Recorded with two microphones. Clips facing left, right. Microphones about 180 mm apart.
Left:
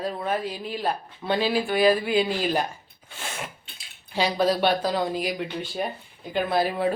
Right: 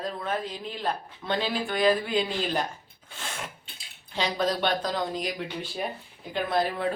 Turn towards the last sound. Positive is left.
turn(degrees=10)  # may be behind; listen again after turning